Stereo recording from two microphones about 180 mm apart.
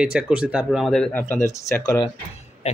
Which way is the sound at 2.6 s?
40° left (ahead or behind).